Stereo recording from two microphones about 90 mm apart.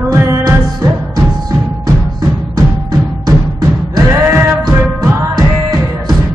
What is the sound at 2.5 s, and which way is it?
Music, 40° right (ahead or behind).